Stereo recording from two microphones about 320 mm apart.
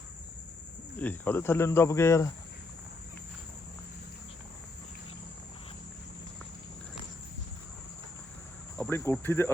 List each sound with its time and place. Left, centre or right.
0.9 s speech: centre
8.8 s speech: centre